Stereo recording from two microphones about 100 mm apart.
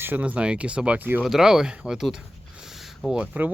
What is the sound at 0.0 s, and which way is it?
Speech, 15° right (ahead or behind).